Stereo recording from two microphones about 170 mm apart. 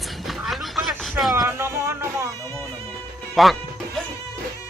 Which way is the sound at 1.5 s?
15° right (ahead or behind).